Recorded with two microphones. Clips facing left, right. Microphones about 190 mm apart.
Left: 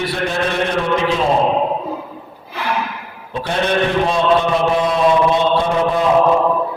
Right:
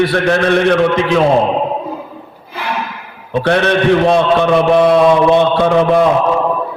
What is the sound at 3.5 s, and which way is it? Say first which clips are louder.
A man's voice: right 6 dB; 70° right (ahead or behind).